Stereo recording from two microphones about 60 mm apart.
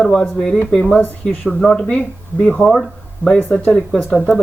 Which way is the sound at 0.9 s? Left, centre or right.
Left.